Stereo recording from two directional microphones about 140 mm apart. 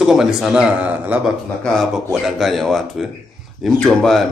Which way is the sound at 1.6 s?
5° left (ahead or behind).